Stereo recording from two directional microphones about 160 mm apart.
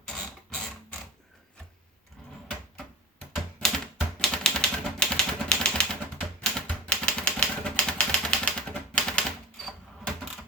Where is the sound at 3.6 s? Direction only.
5° left (ahead or behind).